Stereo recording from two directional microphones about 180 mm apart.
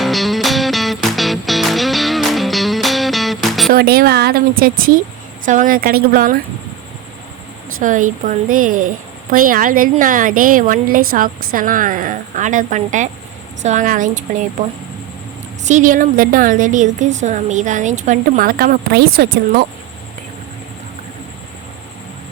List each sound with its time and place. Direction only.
0.0 s music: centre (ahead or behind)
3.7 s a woman's voice: 55° right (ahead or behind)
7.8 s a woman's voice: 50° right (ahead or behind)
15.6 s a woman's voice: 45° right (ahead or behind); by 19.6 s 60° right (ahead or behind)